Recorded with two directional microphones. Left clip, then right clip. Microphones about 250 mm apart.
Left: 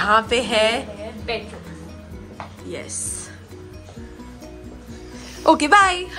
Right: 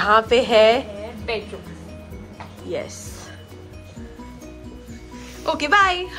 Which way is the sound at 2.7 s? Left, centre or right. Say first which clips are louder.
Right 6 dB; centre.